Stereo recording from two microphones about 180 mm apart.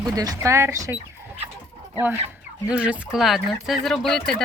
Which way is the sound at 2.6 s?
5° right (ahead or behind).